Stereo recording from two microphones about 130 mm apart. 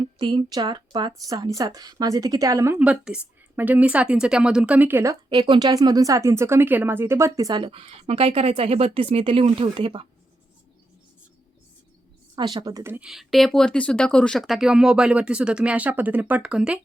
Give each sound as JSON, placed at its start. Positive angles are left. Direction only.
{"t": 0.0, "sound": "a woman's voice", "side_deg": -35}
{"t": 2.7, "sound": "a woman's voice", "side_deg": -10}
{"t": 5.3, "sound": "a woman's voice", "side_deg": -35}
{"t": 7.6, "sound": "speech", "side_deg": -50}
{"t": 12.4, "sound": "a woman's voice", "side_deg": -35}
{"t": 12.8, "sound": "a woman's voice", "side_deg": -15}
{"t": 13.1, "sound": "speech", "side_deg": 0}